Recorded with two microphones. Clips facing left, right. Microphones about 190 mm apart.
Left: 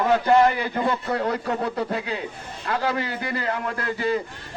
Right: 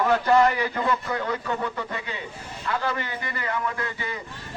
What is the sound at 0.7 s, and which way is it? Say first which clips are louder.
A man's voice: left 2 dB; 30° left (ahead or behind).